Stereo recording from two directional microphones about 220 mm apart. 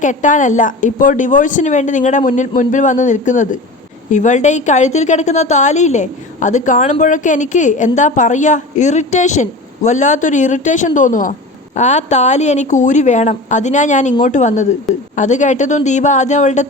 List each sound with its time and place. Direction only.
0.0 s a woman's voice: 35° left (ahead or behind)